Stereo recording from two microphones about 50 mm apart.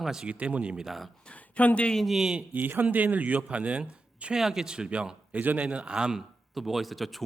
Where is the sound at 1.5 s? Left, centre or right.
Left.